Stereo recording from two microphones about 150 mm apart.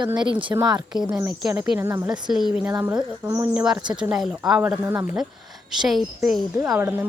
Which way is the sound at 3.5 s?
5° right (ahead or behind).